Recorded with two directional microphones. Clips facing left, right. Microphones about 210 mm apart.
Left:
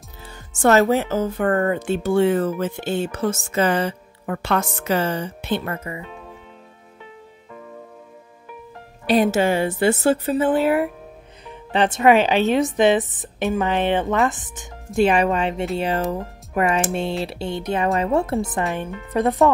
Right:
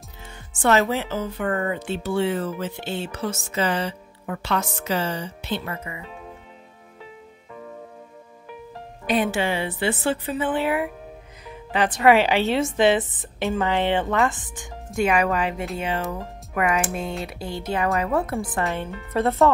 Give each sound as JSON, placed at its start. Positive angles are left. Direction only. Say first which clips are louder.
{"t": 0.2, "sound": "speech", "louder": "left 5 dB", "side_deg": 40}
{"t": 9.0, "sound": "a woman's voice", "louder": "left 5 dB", "side_deg": 40}
{"t": 11.7, "sound": "a woman's voice", "louder": "left 2 dB", "side_deg": 25}
{"t": 15.0, "sound": "a woman's voice", "louder": "left 4 dB", "side_deg": 30}
{"t": 15.8, "sound": "a woman's voice", "louder": "left 3 dB", "side_deg": 35}